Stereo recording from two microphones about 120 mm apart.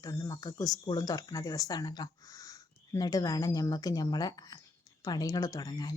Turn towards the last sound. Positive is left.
turn(degrees=30)  # may be behind; listen again after turning